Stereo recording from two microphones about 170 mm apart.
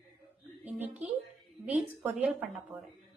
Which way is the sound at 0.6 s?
10° right (ahead or behind).